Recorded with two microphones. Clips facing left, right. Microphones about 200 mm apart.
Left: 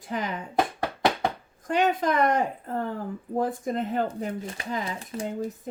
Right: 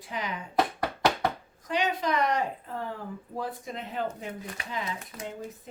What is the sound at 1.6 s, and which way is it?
Speech, 50° left (ahead or behind).